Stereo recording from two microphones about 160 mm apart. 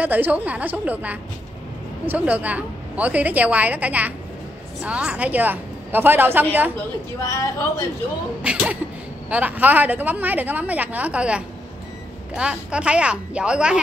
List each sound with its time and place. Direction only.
0.0 s a woman's voice: 10° right (ahead or behind)
7.2 s a woman's voice: 15° left (ahead or behind)
8.4 s a woman's voice: 5° right (ahead or behind)